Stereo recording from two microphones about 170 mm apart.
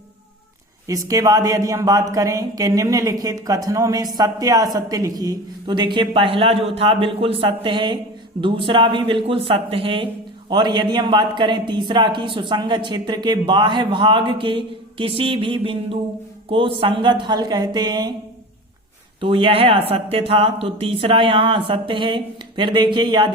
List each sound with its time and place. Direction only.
0.9 s a woman's voice: 20° right (ahead or behind)
19.2 s speech: 30° right (ahead or behind)